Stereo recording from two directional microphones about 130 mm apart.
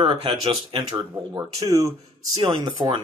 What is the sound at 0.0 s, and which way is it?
Speech, 45° right (ahead or behind).